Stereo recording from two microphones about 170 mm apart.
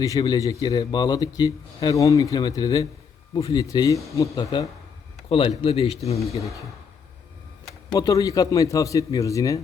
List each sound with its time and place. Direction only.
0.0 s a man's voice: 20° left (ahead or behind)
7.9 s a man's voice: 20° left (ahead or behind)